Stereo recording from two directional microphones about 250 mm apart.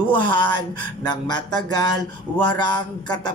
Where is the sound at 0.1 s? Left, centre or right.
Centre.